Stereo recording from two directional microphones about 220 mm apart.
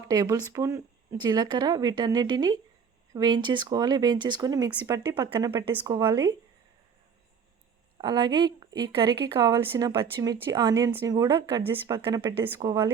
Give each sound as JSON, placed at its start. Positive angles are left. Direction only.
{"t": 0.1, "sound": "a woman's voice", "side_deg": -15}
{"t": 7.9, "sound": "a woman's voice", "side_deg": -20}